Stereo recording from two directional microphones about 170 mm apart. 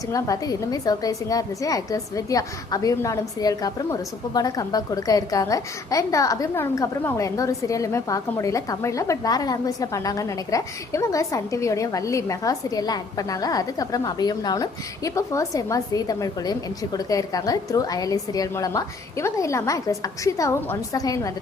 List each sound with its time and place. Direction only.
0.1 s a woman's voice: 20° left (ahead or behind)